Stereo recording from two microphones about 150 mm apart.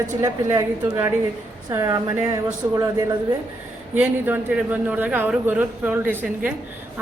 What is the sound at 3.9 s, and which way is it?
A man's voice, 10° right (ahead or behind).